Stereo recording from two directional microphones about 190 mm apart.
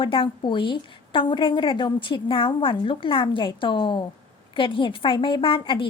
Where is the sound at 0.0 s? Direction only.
25° left (ahead or behind).